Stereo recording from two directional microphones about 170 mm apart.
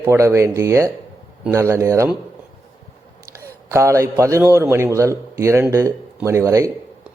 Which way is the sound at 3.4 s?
15° right (ahead or behind).